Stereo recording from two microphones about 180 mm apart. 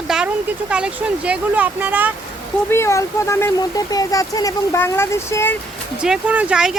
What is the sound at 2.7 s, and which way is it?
Speech, 15° left (ahead or behind).